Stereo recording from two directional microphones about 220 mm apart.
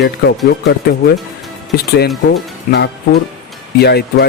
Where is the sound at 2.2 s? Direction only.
50° left (ahead or behind).